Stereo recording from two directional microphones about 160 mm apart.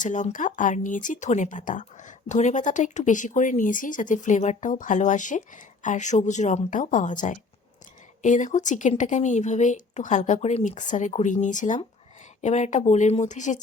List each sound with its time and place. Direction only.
0.0 s speech: 50° left (ahead or behind)